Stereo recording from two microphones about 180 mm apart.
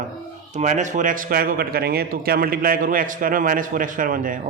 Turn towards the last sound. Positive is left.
turn(degrees=-50)  # may be behind; listen again after turning